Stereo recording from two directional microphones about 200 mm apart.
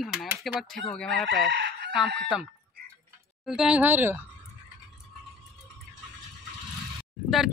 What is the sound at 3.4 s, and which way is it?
Speech, centre (ahead or behind).